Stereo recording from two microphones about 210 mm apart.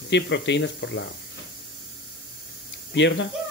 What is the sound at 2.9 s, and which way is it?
Speech, 60° left (ahead or behind).